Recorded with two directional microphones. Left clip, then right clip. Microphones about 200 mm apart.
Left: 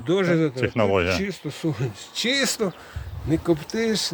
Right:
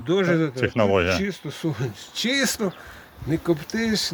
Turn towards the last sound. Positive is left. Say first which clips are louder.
# left 1 dB
turn(degrees=10)  # may be behind; listen again after turning